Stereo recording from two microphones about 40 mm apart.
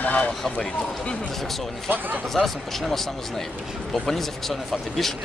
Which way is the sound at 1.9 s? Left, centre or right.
Right.